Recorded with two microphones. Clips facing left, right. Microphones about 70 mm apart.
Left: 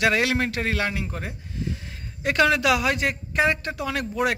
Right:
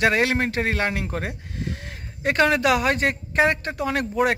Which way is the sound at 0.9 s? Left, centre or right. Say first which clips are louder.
Right 3 dB; right.